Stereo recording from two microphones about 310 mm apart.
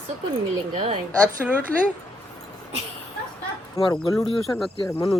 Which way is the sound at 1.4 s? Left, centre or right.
Centre.